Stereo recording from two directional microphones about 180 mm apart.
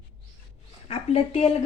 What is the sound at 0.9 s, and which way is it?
Speech, 35° left (ahead or behind).